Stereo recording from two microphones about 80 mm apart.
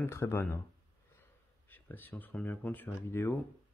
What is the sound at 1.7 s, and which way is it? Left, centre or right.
Speech, left.